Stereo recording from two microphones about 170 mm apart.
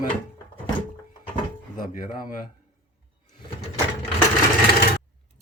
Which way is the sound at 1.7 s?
55° left (ahead or behind).